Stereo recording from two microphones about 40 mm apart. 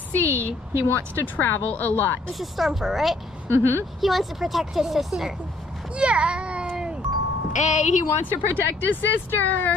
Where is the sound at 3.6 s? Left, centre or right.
Right.